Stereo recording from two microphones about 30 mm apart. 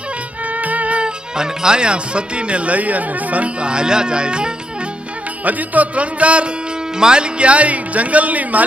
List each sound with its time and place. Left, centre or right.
0.6 s music: right
1.0 s speech: right
3.6 s speech: right
5.4 s music: right
7.0 s speech: right